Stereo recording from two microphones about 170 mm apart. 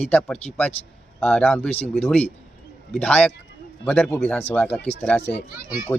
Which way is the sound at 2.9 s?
10° left (ahead or behind).